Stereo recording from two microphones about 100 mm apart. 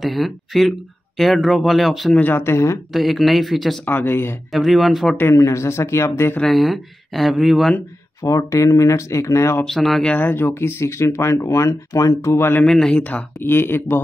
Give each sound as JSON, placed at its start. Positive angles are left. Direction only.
{"t": 0.0, "sound": "speech", "side_deg": 0}
{"t": 2.1, "sound": "speech", "side_deg": 20}
{"t": 2.9, "sound": "speech", "side_deg": 0}
{"t": 3.8, "sound": "speech", "side_deg": 20}
{"t": 4.5, "sound": "speech", "side_deg": 0}
{"t": 5.1, "sound": "speech", "side_deg": 25}
{"t": 6.4, "sound": "speech", "side_deg": 0}
{"t": 8.2, "sound": "speech", "side_deg": 35}
{"t": 9.7, "sound": "speech", "side_deg": 5}
{"t": 10.1, "sound": "speech", "side_deg": 20}
{"t": 12.6, "sound": "speech", "side_deg": 5}
{"t": 13.4, "sound": "speech", "side_deg": 20}